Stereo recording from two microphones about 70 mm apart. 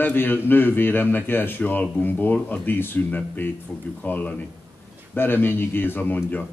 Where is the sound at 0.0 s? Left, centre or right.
Left.